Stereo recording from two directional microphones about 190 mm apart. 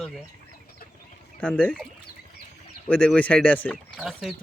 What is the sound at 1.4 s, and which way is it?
Speech, 10° left (ahead or behind).